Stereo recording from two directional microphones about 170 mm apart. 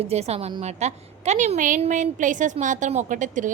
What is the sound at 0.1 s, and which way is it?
A woman's voice, 40° right (ahead or behind).